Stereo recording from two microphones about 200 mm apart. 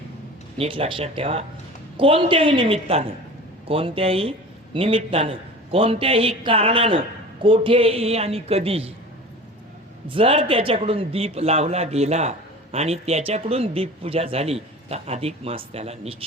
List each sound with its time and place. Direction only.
0.5 s a woman's voice: 30° right (ahead or behind)
10.1 s a man's voice: 25° right (ahead or behind)